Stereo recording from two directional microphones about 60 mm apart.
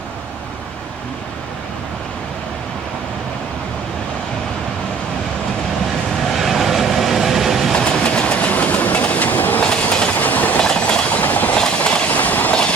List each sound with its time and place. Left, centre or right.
6.3 s vehicle: centre
7.7 s train: centre; by 9.6 s left
9.6 s train: centre
10.6 s train: centre; by 11.5 s left
11.5 s train: centre